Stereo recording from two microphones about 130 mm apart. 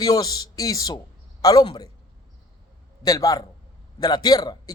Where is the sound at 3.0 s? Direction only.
30° left (ahead or behind).